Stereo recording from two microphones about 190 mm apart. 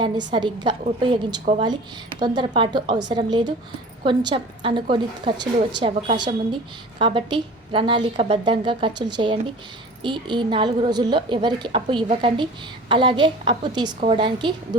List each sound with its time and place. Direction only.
0.0 s a woman's voice: 25° right (ahead or behind)